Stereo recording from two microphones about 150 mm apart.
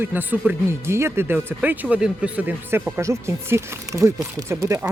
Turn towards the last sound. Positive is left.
turn(degrees=-20)  # may be behind; listen again after turning